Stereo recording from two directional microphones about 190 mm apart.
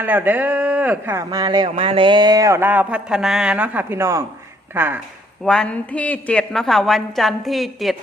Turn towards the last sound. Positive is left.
turn(degrees=0)  # may be behind; listen again after turning